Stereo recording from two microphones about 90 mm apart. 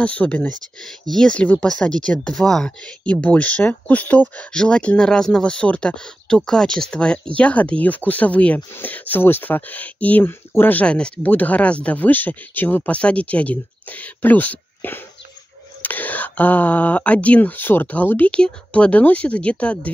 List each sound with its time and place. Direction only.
0.0 s speech: 15° left (ahead or behind)